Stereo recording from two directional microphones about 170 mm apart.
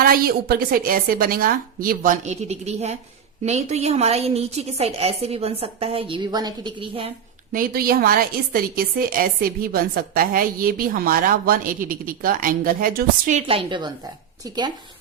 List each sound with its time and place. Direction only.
0.0 s a woman's voice: 60° right (ahead or behind); by 7.1 s 30° right (ahead or behind)
7.5 s a woman's voice: 60° right (ahead or behind)
13.5 s a woman's voice: 30° right (ahead or behind)